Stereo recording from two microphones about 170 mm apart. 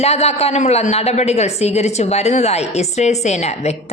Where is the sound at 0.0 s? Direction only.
40° left (ahead or behind).